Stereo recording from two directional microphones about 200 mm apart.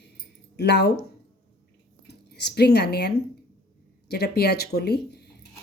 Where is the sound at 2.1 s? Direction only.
55° left (ahead or behind).